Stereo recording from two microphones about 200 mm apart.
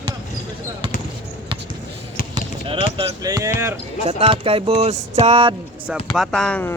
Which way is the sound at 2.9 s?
30° right (ahead or behind).